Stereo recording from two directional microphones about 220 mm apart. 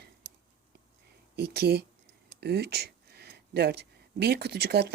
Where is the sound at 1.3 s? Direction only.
45° right (ahead or behind).